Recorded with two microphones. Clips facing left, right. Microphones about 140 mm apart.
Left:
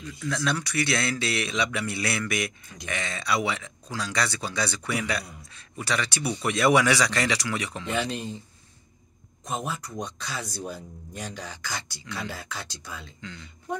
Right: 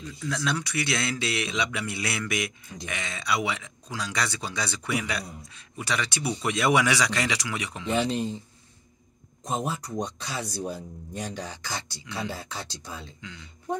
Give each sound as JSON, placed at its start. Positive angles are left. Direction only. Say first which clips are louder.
{"t": 0.0, "sound": "speech", "louder": "left 1 dB", "side_deg": -15}
{"t": 9.5, "sound": "speech", "louder": "right 2 dB", "side_deg": -25}